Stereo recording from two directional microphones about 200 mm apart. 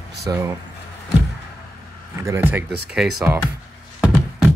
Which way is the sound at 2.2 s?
10° right (ahead or behind).